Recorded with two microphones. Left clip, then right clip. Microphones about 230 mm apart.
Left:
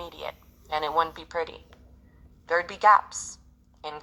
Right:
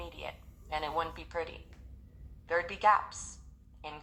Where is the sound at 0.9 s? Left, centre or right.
Left.